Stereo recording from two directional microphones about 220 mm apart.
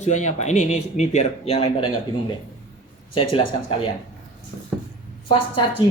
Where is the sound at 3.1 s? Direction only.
25° left (ahead or behind).